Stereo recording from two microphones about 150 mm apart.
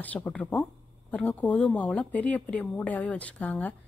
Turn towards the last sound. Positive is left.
turn(degrees=10)  # may be behind; listen again after turning